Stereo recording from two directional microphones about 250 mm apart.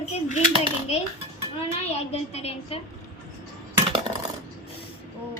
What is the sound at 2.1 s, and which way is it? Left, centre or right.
Speech, left.